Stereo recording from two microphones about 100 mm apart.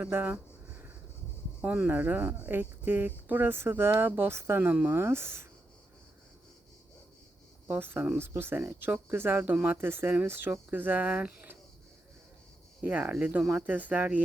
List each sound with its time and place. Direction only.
0.0 s speech: 20° right (ahead or behind)
1.6 s speech: 15° right (ahead or behind)
7.7 s speech: 20° right (ahead or behind)
12.8 s speech: 15° right (ahead or behind)